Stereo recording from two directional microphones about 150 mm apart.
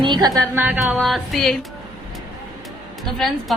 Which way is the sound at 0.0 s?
30° right (ahead or behind).